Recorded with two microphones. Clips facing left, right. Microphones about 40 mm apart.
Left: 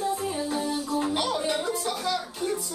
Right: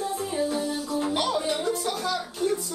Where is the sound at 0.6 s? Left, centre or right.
Centre.